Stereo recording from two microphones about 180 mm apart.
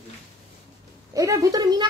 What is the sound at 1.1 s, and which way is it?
Speech, 20° right (ahead or behind).